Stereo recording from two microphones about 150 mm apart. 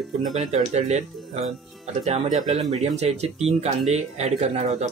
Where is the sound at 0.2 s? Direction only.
50° right (ahead or behind).